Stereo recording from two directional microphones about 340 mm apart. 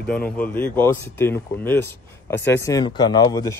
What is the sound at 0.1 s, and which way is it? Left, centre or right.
Speech, centre.